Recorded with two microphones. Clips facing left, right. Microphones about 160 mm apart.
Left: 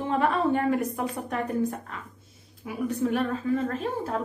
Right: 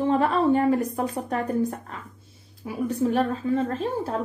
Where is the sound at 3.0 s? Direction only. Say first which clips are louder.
Right 3 dB; 30° right (ahead or behind).